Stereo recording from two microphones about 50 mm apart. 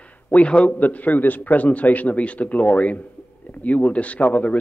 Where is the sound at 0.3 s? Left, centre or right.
Left.